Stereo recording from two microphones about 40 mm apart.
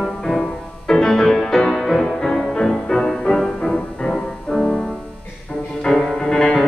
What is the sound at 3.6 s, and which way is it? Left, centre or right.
Music, left.